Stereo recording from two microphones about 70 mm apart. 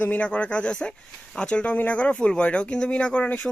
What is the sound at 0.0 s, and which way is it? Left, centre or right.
Speech, left.